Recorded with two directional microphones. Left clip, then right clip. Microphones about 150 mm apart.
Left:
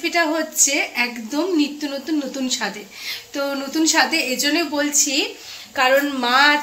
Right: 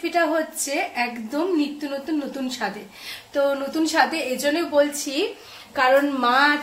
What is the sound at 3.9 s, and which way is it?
A woman's voice, centre (ahead or behind).